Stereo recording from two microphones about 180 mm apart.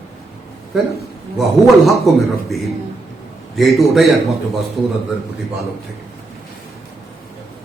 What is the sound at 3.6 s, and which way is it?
A man's voice, centre (ahead or behind).